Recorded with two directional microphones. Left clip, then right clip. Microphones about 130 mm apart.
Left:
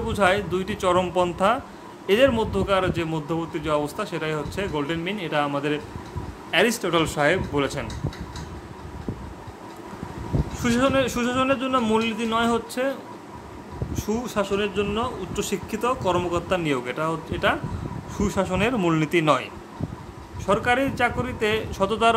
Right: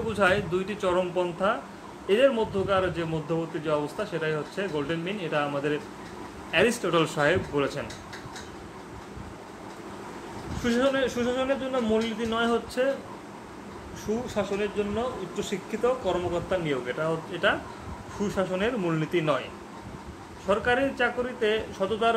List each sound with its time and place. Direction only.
0.1 s a man's voice: 40° left (ahead or behind)
6.5 s speech: 30° left (ahead or behind)
7.5 s speech: 35° left (ahead or behind)
10.6 s a man's voice: 55° left (ahead or behind)
14.0 s a man's voice: 75° left (ahead or behind)
15.8 s a man's voice: 90° left; by 19.4 s 70° left (ahead or behind)
20.4 s speech: 45° left (ahead or behind); by 22.1 s 80° left